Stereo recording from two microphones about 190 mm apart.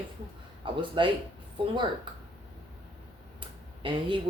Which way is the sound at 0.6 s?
25° right (ahead or behind).